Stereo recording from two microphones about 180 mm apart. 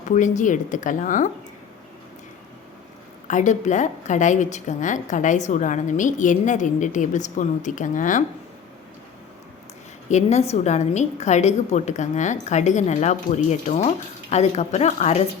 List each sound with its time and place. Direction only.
0.1 s a woman's voice: 45° left (ahead or behind)
3.2 s a woman's voice: 45° left (ahead or behind)
10.1 s a woman's voice: 40° left (ahead or behind)